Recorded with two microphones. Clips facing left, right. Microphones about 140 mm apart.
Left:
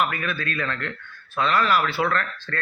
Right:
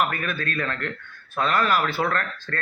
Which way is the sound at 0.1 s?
45° right (ahead or behind).